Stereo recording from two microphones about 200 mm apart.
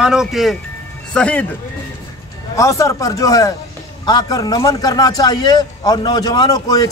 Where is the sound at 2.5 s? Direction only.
15° left (ahead or behind).